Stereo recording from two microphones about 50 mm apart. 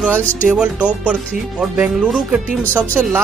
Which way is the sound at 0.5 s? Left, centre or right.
Right.